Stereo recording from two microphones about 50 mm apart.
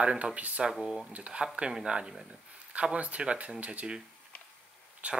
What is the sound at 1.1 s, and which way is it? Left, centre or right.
Speech, right.